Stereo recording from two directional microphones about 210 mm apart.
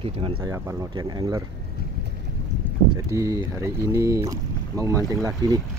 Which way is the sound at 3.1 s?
15° right (ahead or behind).